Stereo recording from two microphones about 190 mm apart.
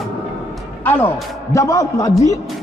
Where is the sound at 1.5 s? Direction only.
15° left (ahead or behind).